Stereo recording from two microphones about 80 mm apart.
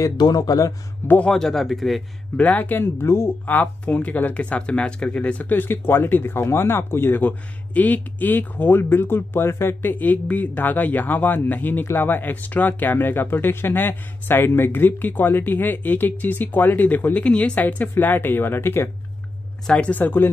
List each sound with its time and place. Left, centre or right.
0.2 s speech: left
1.0 s speech: left
1.3 s a man's voice: centre
2.3 s speech: centre
19.6 s speech: centre
19.9 s speech: left